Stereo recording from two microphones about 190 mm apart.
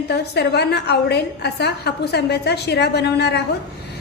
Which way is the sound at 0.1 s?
60° left (ahead or behind).